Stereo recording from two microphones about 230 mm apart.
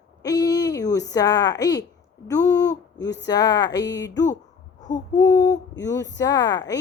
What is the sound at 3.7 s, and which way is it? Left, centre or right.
Speech, left.